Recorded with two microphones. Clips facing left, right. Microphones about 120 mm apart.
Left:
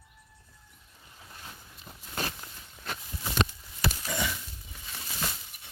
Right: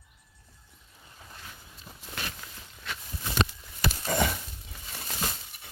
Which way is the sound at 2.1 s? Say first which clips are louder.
Left 4 dB; 40° left (ahead or behind).